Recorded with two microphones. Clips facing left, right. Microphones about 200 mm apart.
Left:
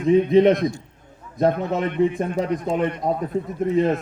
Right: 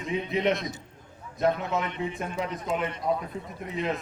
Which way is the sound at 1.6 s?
35° left (ahead or behind).